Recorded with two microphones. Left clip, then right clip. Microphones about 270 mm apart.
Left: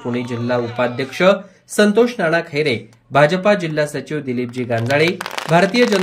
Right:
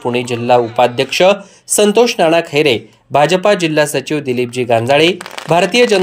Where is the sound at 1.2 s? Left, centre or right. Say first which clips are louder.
Right 2 dB; right.